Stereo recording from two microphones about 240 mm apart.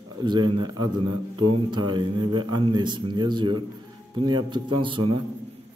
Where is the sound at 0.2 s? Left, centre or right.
Centre.